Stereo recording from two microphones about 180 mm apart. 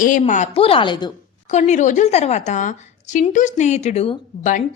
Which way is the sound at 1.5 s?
40° left (ahead or behind).